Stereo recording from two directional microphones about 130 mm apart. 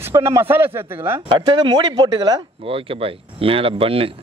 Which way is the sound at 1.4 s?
35° right (ahead or behind).